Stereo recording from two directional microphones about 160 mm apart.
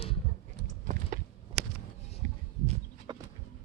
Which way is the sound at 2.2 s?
50° right (ahead or behind).